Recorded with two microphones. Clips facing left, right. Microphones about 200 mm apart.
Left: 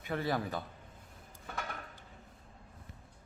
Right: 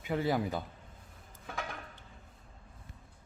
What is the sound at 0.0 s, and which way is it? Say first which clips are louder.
Speech: right 3 dB; 15° right (ahead or behind).